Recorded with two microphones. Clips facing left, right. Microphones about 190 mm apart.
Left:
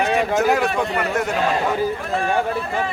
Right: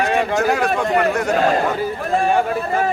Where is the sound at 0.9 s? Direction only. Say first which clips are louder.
Right 4 dB; centre (ahead or behind).